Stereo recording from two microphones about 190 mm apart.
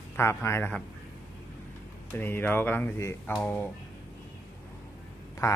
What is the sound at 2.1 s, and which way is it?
Speech, 10° left (ahead or behind).